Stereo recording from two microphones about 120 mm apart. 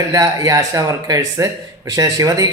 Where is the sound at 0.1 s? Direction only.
30° right (ahead or behind).